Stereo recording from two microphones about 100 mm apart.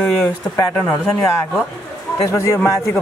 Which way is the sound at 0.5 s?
20° left (ahead or behind).